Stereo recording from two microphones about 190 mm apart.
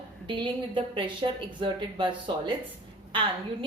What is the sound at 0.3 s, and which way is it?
A woman's voice, 25° right (ahead or behind).